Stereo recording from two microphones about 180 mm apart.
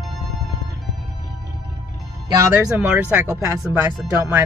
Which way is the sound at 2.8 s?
15° right (ahead or behind).